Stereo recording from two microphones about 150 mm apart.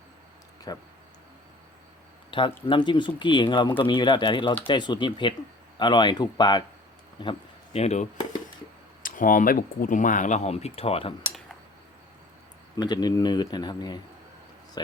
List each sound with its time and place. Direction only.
0.7 s speech: 25° left (ahead or behind)
2.3 s speech: 35° left (ahead or behind)
9.0 s speech: 65° left (ahead or behind); by 11.1 s 40° left (ahead or behind)
12.7 s speech: 25° left (ahead or behind)